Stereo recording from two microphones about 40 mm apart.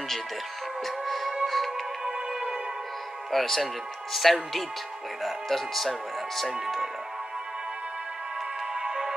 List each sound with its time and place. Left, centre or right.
0.8 s music: centre
2.0 s music: centre
3.3 s speech: centre
6.6 s music: centre
8.7 s music: centre